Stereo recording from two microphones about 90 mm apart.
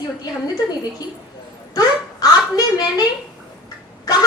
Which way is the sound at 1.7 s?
45° left (ahead or behind).